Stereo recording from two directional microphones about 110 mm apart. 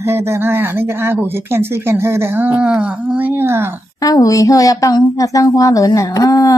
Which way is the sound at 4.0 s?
35° left (ahead or behind).